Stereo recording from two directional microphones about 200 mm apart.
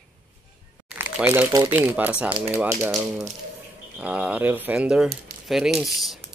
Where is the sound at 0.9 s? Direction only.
10° right (ahead or behind).